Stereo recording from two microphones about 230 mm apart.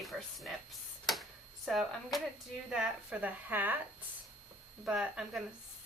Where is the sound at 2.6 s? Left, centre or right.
Centre.